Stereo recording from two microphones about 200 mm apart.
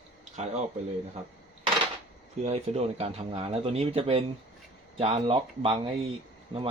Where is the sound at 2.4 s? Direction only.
30° right (ahead or behind).